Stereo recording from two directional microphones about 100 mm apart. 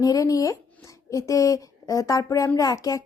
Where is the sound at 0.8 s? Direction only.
35° left (ahead or behind).